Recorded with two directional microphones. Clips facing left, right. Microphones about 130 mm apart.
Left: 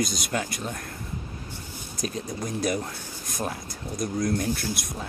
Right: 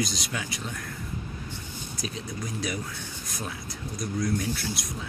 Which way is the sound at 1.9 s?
50° left (ahead or behind).